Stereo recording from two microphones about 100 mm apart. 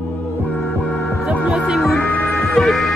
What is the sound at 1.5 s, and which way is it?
Music, centre (ahead or behind).